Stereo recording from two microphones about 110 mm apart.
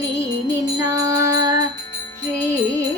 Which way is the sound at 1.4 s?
35° right (ahead or behind).